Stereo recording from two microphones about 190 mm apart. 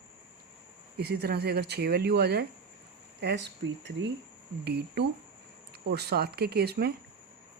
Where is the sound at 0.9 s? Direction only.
55° right (ahead or behind).